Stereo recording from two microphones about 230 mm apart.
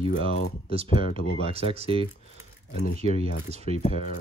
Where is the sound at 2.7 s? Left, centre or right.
Left.